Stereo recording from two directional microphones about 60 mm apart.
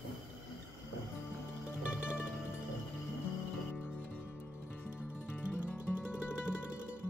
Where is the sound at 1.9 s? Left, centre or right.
Centre.